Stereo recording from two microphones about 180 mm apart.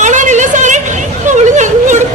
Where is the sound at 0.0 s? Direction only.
40° right (ahead or behind).